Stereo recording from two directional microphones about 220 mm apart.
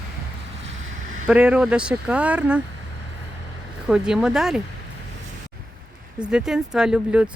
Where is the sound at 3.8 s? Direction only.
5° right (ahead or behind).